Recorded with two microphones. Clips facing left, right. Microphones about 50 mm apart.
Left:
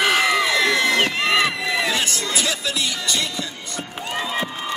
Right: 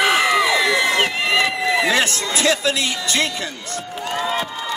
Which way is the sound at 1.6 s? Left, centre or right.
Right.